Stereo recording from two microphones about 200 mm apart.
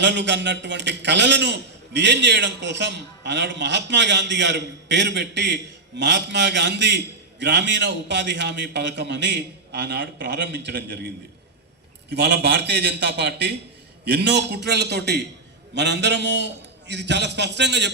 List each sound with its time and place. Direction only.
0.0 s a man's voice: 60° right (ahead or behind)